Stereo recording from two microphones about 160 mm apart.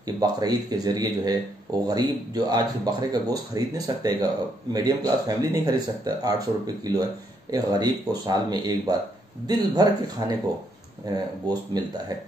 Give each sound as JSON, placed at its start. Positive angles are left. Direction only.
{"t": 0.0, "sound": "speech", "side_deg": -25}